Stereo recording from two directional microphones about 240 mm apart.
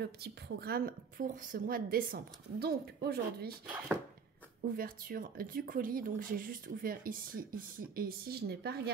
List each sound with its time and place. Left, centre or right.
0.0 s speech: right
4.7 s speech: right